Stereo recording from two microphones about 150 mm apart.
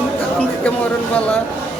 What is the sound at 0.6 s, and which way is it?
Speech, 10° left (ahead or behind).